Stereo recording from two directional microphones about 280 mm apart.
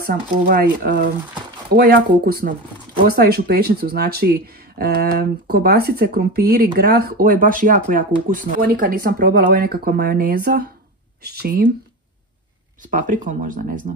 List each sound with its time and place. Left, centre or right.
0.0 s speech: right
12.8 s speech: right